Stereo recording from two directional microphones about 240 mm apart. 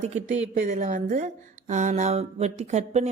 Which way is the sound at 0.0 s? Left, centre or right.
Right.